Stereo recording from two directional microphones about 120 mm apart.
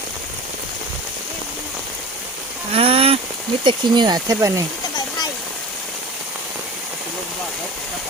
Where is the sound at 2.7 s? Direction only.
55° right (ahead or behind).